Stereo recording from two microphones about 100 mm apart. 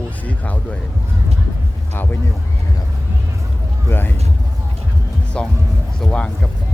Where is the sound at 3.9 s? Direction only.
20° left (ahead or behind).